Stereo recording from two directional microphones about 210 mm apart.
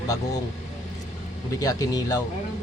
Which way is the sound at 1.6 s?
15° left (ahead or behind).